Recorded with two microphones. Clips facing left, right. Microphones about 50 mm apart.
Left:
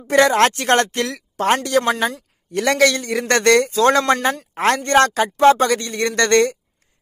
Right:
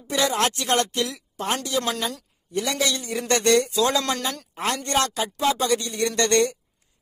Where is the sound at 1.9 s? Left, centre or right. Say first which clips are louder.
Left 8 dB; left.